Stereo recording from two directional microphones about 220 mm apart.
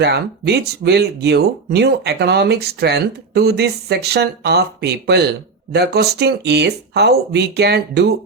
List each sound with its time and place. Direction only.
0.0 s speech: 50° right (ahead or behind)